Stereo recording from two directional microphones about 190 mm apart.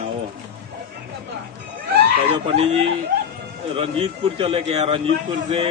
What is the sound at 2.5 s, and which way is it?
A man's voice, 30° right (ahead or behind).